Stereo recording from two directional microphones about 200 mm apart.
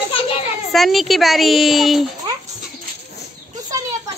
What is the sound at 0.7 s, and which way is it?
A woman's voice, centre (ahead or behind).